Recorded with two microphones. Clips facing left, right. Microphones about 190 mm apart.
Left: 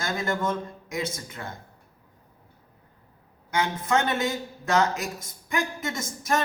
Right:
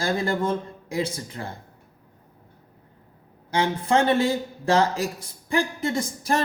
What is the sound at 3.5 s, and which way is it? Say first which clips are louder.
Speech: right 3 dB; 30° right (ahead or behind).